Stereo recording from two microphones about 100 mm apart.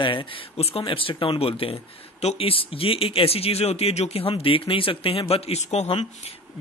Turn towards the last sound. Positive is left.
turn(degrees=85)